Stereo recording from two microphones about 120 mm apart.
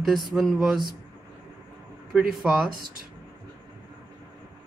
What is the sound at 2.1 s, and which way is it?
Speech, 5° right (ahead or behind).